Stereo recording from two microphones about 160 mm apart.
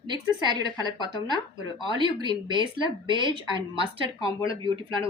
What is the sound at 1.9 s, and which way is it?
A woman's voice, 30° right (ahead or behind).